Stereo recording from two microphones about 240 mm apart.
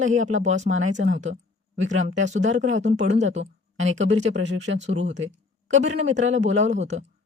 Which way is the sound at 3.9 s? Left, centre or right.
Right.